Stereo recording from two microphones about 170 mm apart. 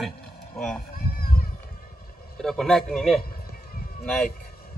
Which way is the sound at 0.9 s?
60° left (ahead or behind).